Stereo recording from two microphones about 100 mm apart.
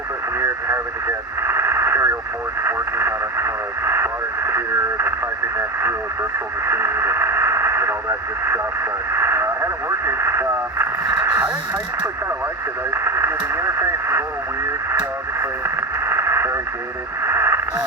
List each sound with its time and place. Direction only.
0.3 s radio: 25° right (ahead or behind)
2.6 s speech: 25° right (ahead or behind)
6.7 s radio: 25° right (ahead or behind)
10.1 s speech: 25° right (ahead or behind)
12.9 s speech: 25° right (ahead or behind)
15.4 s radio: 25° right (ahead or behind)